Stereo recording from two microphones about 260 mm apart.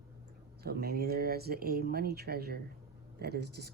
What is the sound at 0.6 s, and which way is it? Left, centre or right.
Speech, right.